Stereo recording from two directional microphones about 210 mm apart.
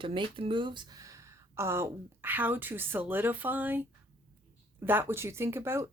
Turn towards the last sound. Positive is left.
turn(degrees=-10)  # may be behind; listen again after turning